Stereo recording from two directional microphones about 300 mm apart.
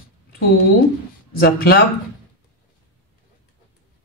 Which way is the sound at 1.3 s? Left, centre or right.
Left.